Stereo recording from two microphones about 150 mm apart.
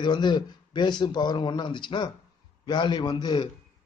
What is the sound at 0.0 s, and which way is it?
A man's voice, 30° left (ahead or behind).